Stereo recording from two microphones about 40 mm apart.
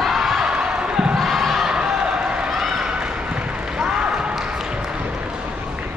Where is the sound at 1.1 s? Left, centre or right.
Centre.